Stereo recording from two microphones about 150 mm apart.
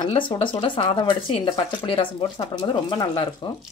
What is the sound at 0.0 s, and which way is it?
Speech, 30° left (ahead or behind).